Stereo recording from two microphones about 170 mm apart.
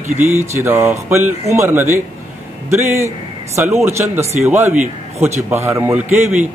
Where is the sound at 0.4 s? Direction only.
15° right (ahead or behind).